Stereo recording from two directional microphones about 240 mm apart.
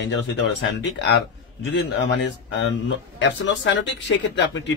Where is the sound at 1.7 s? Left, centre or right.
Left.